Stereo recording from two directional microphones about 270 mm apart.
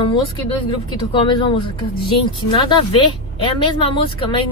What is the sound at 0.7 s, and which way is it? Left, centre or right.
Speech, centre.